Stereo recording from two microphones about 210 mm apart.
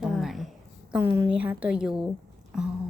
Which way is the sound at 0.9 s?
10° right (ahead or behind).